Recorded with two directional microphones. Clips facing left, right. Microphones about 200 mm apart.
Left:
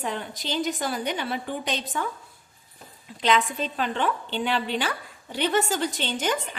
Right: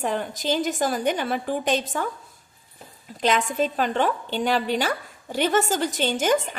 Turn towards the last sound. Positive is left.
turn(degrees=-45)  # may be behind; listen again after turning